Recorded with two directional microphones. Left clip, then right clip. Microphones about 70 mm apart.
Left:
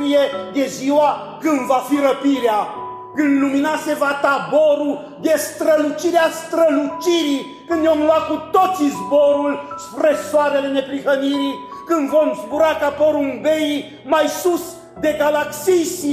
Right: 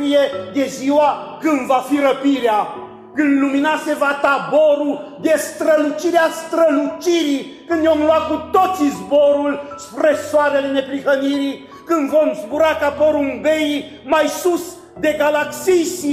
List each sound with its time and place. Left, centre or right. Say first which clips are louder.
0.0 s a man's voice: right 1 dB; centre